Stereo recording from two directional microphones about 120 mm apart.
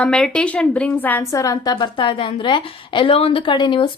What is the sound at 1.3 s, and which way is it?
A woman's voice, 30° left (ahead or behind).